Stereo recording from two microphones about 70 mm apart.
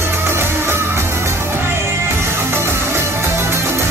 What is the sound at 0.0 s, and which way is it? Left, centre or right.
Music, right.